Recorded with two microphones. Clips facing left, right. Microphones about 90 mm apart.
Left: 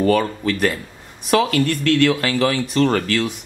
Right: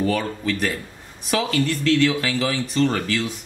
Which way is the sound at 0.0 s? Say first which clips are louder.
Left 5 dB; 55° left (ahead or behind).